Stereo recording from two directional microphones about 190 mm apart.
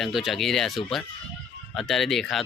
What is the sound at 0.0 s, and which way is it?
Speech, centre (ahead or behind).